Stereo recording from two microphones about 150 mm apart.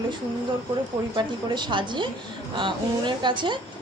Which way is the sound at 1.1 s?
30° right (ahead or behind).